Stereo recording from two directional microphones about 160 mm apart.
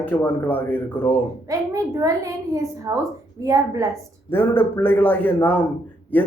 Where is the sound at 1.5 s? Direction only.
20° right (ahead or behind).